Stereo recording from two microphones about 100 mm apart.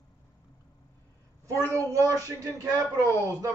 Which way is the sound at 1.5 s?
35° right (ahead or behind).